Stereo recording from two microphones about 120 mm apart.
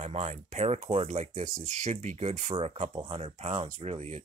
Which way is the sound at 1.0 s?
75° right (ahead or behind).